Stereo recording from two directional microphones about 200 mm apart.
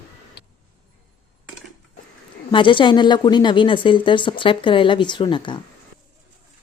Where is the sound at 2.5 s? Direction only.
25° left (ahead or behind).